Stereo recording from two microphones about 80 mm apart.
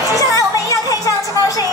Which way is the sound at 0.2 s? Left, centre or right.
Left.